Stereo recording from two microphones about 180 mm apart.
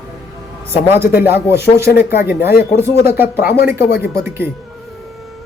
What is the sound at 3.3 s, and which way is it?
Speech, 65° left (ahead or behind).